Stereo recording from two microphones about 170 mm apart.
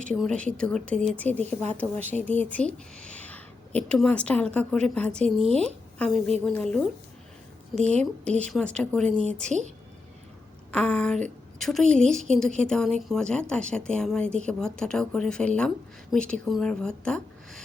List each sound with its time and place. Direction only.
0.1 s a woman's voice: 5° left (ahead or behind)
9.2 s a woman's voice: 45° right (ahead or behind)
10.7 s a woman's voice: 5° left (ahead or behind)